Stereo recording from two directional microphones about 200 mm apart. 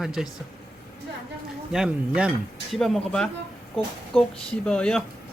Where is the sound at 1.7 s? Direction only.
5° right (ahead or behind).